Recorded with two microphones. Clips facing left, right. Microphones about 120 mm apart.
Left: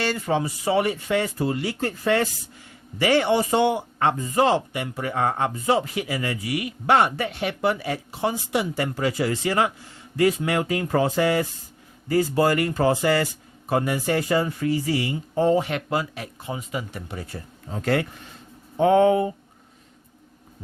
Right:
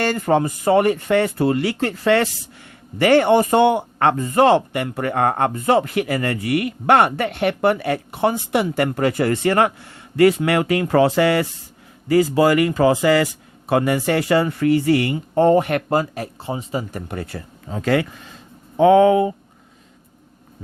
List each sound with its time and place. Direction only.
0.0 s a man's voice: 50° right (ahead or behind); by 2.3 s 75° right (ahead or behind)
3.0 s a man's voice: 55° right (ahead or behind); by 11.4 s 75° right (ahead or behind)
12.0 s speech: 90° right; by 17.0 s 35° right (ahead or behind)
17.1 s speech: 70° right (ahead or behind)
18.8 s speech: 90° right